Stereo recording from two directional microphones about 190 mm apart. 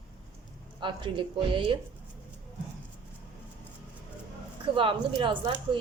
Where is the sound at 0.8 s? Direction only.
25° right (ahead or behind).